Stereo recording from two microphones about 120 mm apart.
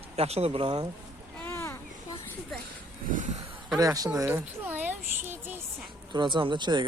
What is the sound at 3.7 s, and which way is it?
Speech, 30° right (ahead or behind).